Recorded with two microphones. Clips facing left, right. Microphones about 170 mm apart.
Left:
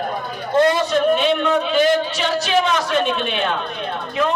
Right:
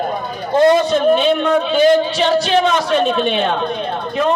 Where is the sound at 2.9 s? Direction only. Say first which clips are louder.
Right 5 dB; 35° right (ahead or behind).